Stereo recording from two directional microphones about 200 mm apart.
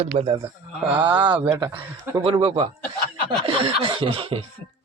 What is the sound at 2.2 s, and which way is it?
A man's voice, 25° right (ahead or behind).